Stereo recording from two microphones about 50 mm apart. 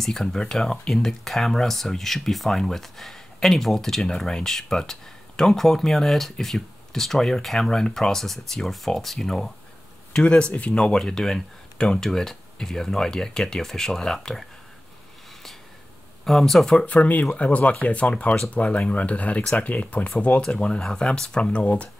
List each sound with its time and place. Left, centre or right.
0.0 s speech: centre
10.1 s speech: left
16.3 s speech: centre
16.8 s speech: left